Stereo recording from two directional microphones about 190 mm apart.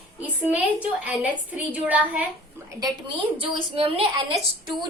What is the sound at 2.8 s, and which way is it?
A woman's voice, 25° right (ahead or behind).